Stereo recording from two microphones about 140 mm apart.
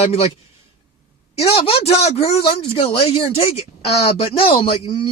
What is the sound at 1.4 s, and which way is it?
Speech, 45° left (ahead or behind).